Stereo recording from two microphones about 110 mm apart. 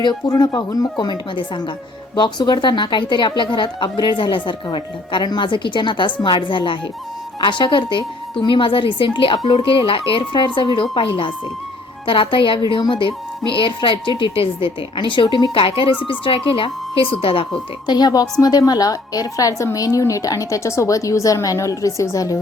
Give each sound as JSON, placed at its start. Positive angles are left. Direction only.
{"t": 0.0, "sound": "a woman's voice", "side_deg": 40}
{"t": 17.8, "sound": "a woman's voice", "side_deg": 40}